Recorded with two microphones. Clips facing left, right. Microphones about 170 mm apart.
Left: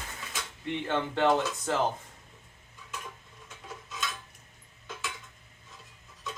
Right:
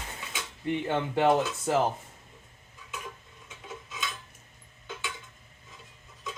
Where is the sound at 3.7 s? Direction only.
Centre (ahead or behind).